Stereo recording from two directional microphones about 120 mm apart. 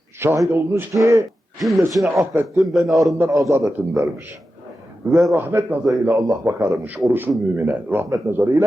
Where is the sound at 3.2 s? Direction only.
25° right (ahead or behind).